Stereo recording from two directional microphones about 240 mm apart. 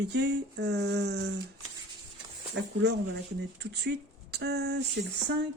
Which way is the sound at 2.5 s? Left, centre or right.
Right.